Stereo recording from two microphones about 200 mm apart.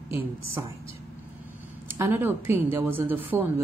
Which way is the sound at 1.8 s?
10° right (ahead or behind).